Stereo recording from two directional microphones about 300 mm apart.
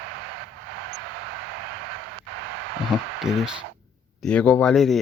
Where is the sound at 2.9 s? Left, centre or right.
Centre.